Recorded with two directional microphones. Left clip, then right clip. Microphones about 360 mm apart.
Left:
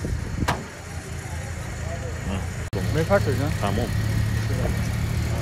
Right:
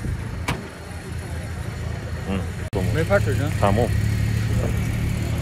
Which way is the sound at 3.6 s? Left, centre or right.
Centre.